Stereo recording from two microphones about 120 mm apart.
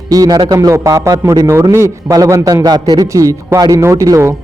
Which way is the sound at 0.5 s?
25° right (ahead or behind).